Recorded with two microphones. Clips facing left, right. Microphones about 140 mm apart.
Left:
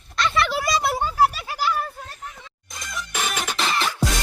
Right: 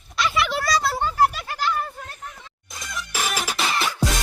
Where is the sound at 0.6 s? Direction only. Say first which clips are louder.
Even; 20° left (ahead or behind).